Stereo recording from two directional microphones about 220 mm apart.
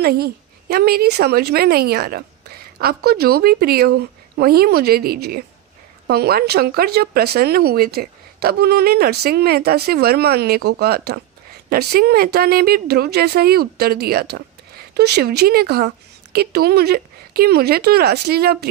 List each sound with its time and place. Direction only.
0.0 s speech: 45° right (ahead or behind)